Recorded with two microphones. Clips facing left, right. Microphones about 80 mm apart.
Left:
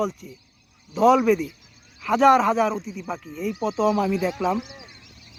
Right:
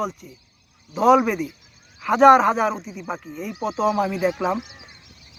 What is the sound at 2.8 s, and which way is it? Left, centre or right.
Speech, right.